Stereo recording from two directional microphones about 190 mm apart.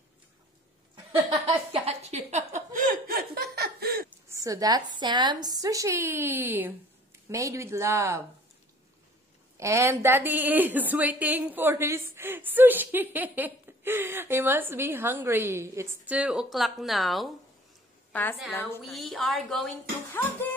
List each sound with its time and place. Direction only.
1.4 s a sound: 30° right (ahead or behind); by 3.4 s 50° right (ahead or behind)
3.5 s laughter: 55° right (ahead or behind)
4.3 s a woman's voice: 15° right (ahead or behind)
9.6 s a woman's voice: 15° right (ahead or behind); by 19.7 s centre (ahead or behind)